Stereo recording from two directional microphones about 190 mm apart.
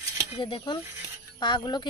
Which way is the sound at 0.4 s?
25° left (ahead or behind).